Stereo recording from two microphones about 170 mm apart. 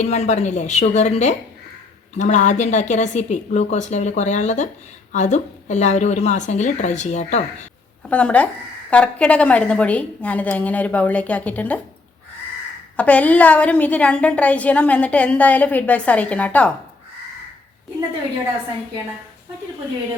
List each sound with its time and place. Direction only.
0.0 s a woman's voice: 40° left (ahead or behind)
8.1 s a woman's voice: 10° left (ahead or behind)
13.0 s a woman's voice: 10° left (ahead or behind)